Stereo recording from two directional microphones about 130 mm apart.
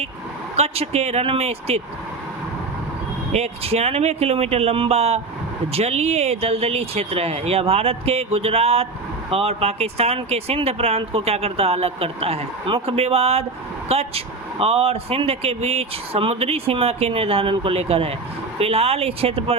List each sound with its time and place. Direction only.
0.5 s speech: 55° right (ahead or behind)
3.3 s speech: 50° right (ahead or behind)